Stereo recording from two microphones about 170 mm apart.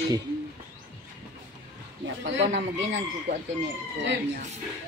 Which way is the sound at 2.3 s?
90° right.